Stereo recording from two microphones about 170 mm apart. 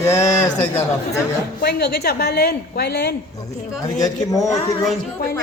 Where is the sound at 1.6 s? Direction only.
70° left (ahead or behind).